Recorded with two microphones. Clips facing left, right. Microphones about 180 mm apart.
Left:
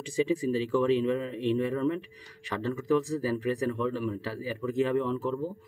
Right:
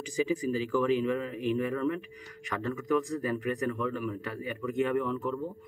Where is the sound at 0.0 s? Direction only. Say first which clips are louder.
Left 2 dB; 30° left (ahead or behind).